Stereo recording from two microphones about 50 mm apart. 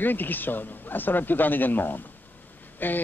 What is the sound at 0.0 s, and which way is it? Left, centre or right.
Speech, left.